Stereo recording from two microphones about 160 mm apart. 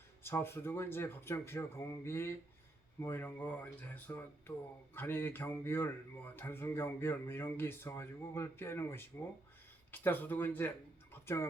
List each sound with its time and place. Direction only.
0.2 s speech: 15° left (ahead or behind)